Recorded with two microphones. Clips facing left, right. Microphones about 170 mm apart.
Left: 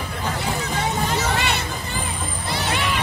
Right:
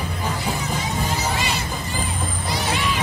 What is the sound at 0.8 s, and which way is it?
Music, 60° left (ahead or behind).